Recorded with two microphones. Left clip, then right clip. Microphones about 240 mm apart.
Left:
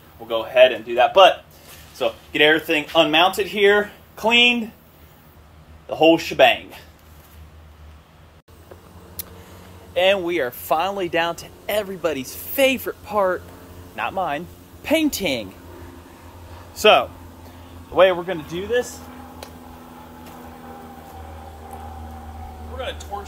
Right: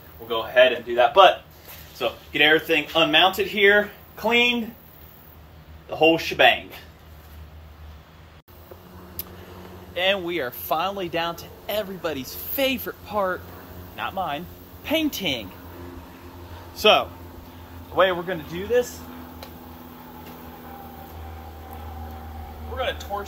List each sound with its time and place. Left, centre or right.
0.3 s a man's voice: left
2.0 s speech: left
5.9 s speech: left
9.9 s a man's voice: centre
16.7 s speech: centre
17.9 s a man's voice: left
22.8 s speech: centre